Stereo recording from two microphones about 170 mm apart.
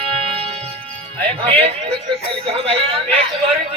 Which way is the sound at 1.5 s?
35° right (ahead or behind).